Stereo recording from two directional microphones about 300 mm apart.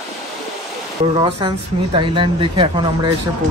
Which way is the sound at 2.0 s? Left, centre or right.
Centre.